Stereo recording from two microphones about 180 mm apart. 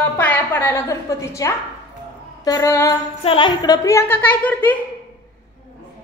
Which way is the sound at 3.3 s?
25° left (ahead or behind).